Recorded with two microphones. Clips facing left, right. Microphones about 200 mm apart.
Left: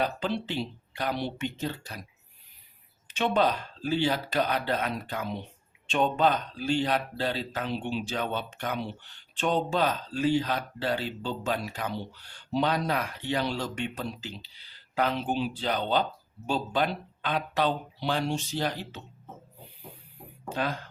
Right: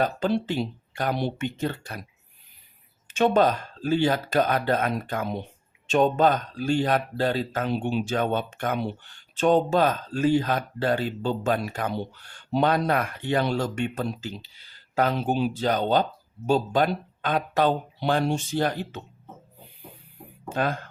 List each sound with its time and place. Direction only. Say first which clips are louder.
0.0 s speech: right 5 dB; 45° right (ahead or behind)
3.1 s speech: right 5 dB; 45° right (ahead or behind)
20.5 s speech: right 4 dB; 50° right (ahead or behind)